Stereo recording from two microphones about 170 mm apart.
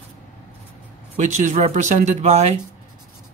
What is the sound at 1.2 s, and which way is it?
Speech, 45° right (ahead or behind).